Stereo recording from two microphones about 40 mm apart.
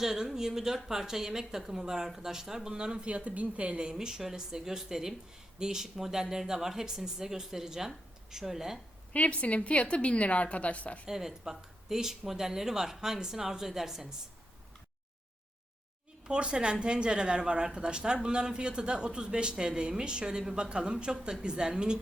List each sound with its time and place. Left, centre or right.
0.0 s a woman's voice: centre; by 3.8 s right
3.9 s a woman's voice: centre
9.1 s a woman's voice: left
11.1 s a woman's voice: centre
16.2 s speech: right